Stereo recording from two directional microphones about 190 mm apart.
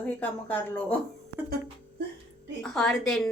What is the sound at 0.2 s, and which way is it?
Speech, 10° left (ahead or behind).